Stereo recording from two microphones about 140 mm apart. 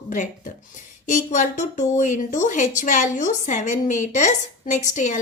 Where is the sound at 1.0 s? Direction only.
65° left (ahead or behind).